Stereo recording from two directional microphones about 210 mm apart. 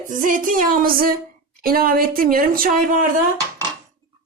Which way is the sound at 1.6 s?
45° right (ahead or behind).